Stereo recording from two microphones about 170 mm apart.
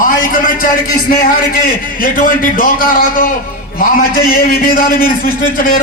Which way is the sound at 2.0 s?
55° left (ahead or behind).